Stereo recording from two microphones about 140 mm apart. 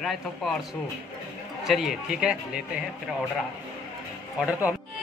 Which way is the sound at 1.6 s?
Centre (ahead or behind).